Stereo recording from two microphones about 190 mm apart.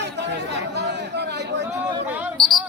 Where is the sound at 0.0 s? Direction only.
65° right (ahead or behind).